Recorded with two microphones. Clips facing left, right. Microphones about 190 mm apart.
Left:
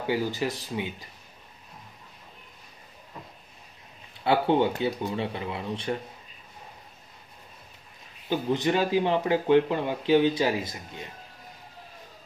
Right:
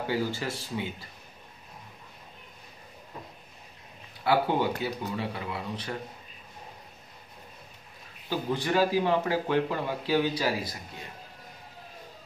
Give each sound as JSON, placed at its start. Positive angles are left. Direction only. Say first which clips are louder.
{"t": 0.0, "sound": "speech", "louder": "left 2 dB", "side_deg": 15}
{"t": 4.2, "sound": "speech", "louder": "left 3 dB", "side_deg": 25}
{"t": 8.3, "sound": "speech", "louder": "left 4 dB", "side_deg": 20}